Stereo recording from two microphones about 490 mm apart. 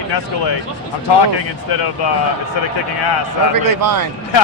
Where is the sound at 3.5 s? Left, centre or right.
Right.